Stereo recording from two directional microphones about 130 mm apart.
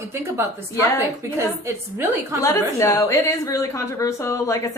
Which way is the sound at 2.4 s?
25° left (ahead or behind).